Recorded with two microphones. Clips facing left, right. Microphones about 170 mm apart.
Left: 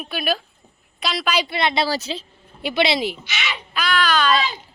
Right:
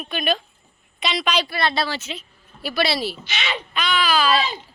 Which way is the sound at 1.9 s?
35° left (ahead or behind).